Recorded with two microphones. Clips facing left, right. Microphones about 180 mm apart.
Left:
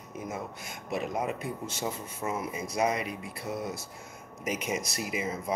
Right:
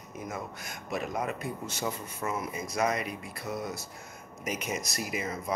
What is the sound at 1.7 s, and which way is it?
Speech, 25° left (ahead or behind).